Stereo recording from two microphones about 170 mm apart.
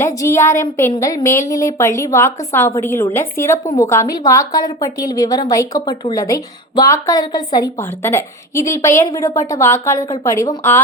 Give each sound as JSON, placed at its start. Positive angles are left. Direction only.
{"t": 0.0, "sound": "a woman's voice", "side_deg": 15}